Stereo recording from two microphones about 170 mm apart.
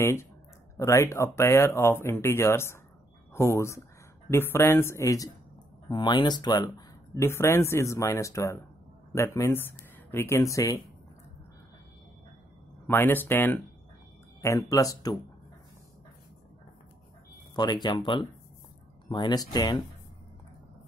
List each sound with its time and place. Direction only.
0.0 s speech: 15° left (ahead or behind)
12.8 s speech: 10° left (ahead or behind)
17.8 s speech: 25° left (ahead or behind)